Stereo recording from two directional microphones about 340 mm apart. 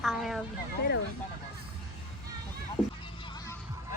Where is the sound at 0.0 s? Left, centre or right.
Centre.